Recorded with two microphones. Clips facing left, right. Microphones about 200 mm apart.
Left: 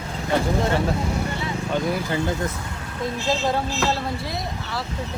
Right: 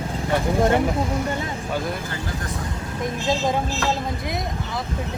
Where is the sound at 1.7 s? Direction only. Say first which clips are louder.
Left 3 dB; centre (ahead or behind).